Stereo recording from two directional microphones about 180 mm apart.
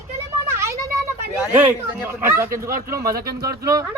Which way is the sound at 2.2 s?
15° right (ahead or behind).